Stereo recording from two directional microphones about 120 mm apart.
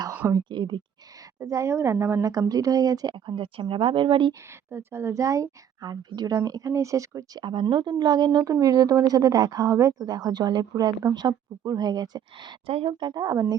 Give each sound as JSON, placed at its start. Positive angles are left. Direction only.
{"t": 0.1, "sound": "a sound", "side_deg": -15}
{"t": 0.3, "sound": "speech", "side_deg": -40}
{"t": 1.4, "sound": "speech", "side_deg": -25}
{"t": 4.7, "sound": "speech", "side_deg": -20}
{"t": 7.4, "sound": "speech", "side_deg": -40}
{"t": 12.6, "sound": "a woman's voice", "side_deg": -50}
{"t": 12.9, "sound": "speech", "side_deg": -35}